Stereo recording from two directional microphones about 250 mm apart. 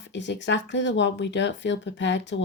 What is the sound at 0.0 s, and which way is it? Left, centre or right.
Speech, left.